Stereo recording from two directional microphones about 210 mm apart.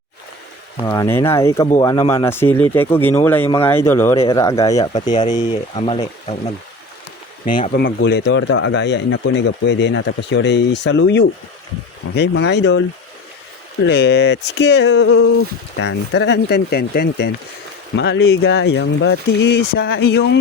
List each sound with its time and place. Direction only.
0.9 s speech: 15° left (ahead or behind)
7.7 s speech: 50° left (ahead or behind)
13.8 s speech: 50° left (ahead or behind)